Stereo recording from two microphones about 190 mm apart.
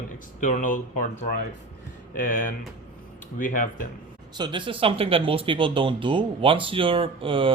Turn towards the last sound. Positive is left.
turn(degrees=-30)  # may be behind; listen again after turning